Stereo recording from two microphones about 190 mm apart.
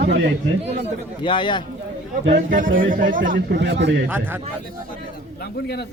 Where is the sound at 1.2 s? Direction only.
25° left (ahead or behind).